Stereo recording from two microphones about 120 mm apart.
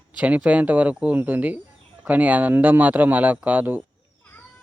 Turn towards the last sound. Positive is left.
turn(degrees=-15)  # may be behind; listen again after turning